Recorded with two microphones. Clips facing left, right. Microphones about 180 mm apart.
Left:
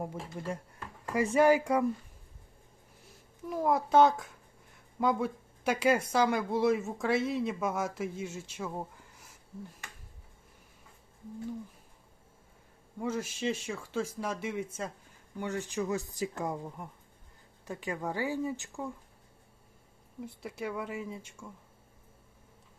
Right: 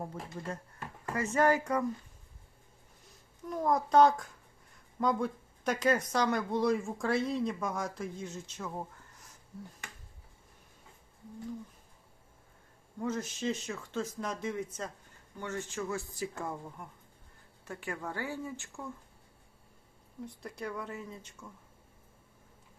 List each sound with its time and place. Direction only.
0.0 s speech: 10° left (ahead or behind)
3.5 s a child's voice: 5° left (ahead or behind)
13.0 s speech: 10° left (ahead or behind)
20.2 s speech: 5° left (ahead or behind)